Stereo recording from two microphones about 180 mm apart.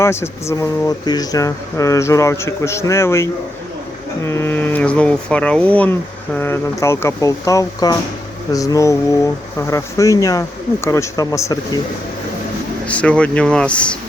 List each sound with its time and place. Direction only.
0.0 s speech: 15° left (ahead or behind)
12.9 s speech: 5° left (ahead or behind)